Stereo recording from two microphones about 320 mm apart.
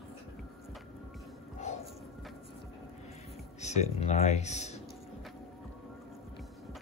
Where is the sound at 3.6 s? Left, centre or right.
Left.